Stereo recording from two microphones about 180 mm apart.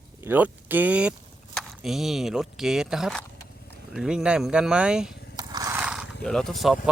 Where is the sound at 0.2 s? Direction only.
10° right (ahead or behind).